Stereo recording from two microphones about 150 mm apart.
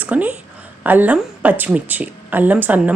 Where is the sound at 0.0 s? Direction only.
10° right (ahead or behind).